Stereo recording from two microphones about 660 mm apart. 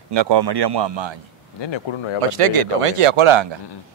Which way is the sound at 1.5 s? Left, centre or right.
Left.